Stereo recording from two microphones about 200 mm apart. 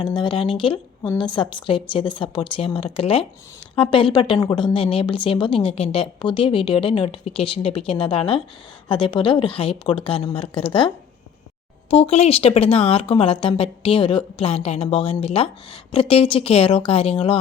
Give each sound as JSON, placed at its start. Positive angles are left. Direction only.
{"t": 0.0, "sound": "a woman's voice", "side_deg": 25}